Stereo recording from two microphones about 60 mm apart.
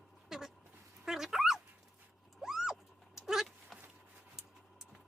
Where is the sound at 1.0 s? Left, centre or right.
Centre.